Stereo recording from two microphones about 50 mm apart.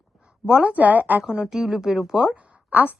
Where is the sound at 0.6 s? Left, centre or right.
Right.